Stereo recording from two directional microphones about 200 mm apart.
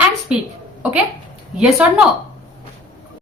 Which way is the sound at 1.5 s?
5° right (ahead or behind).